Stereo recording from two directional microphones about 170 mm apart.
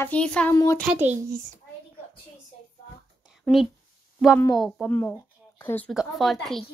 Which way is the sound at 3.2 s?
Centre (ahead or behind).